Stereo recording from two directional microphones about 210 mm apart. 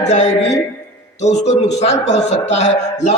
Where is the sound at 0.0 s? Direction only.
35° left (ahead or behind).